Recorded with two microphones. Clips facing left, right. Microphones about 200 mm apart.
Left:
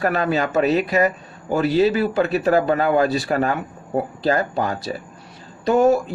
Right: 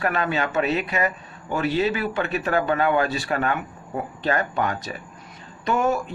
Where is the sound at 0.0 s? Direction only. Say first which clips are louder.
Left 4 dB; 40° left (ahead or behind).